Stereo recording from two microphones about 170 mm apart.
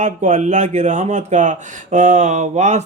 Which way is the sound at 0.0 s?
45° right (ahead or behind).